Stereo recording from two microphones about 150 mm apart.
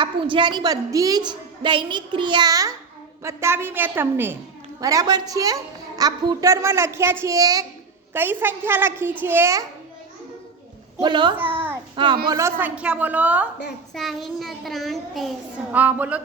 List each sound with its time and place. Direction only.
0.0 s a woman's voice: 35° right (ahead or behind)
8.1 s a woman's voice: 15° right (ahead or behind)
11.0 s a child's voice: 30° right (ahead or behind)
11.3 s a child's voice: 15° right (ahead or behind)
11.9 s a child's voice: 30° right (ahead or behind)
12.3 s a woman's voice: 20° right (ahead or behind)
13.9 s child singing: centre (ahead or behind)
15.7 s a woman's voice: 10° right (ahead or behind)